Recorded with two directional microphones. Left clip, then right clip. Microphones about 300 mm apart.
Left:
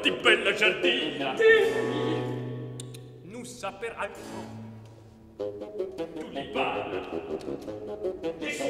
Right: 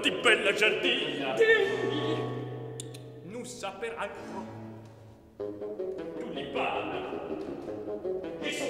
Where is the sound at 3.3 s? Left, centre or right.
Centre.